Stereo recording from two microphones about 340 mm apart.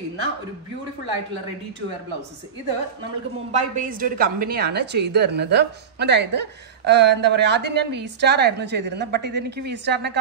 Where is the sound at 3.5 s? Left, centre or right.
Right.